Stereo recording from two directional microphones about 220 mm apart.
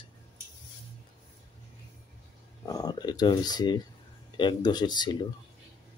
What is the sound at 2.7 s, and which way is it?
Speech, 15° left (ahead or behind).